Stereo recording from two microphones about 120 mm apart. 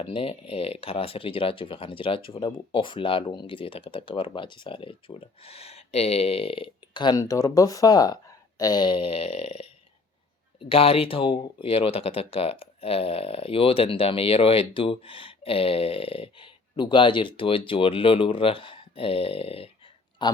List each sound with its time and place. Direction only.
0.0 s speech: 50° left (ahead or behind)
10.6 s speech: 50° left (ahead or behind)
20.2 s speech: 40° left (ahead or behind)